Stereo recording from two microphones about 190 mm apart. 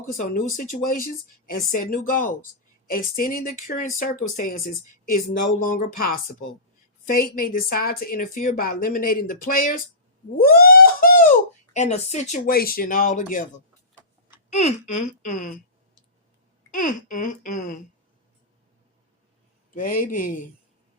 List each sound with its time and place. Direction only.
0.1 s speech: 45° left (ahead or behind)
14.5 s speech: 40° left (ahead or behind)
16.7 s speech: 45° left (ahead or behind)
19.7 s speech: 45° left (ahead or behind)